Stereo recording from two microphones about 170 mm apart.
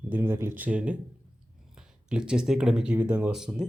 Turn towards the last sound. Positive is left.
turn(degrees=-5)  # may be behind; listen again after turning